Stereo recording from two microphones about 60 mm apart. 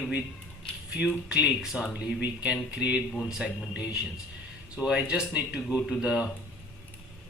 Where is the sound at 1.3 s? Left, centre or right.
Centre.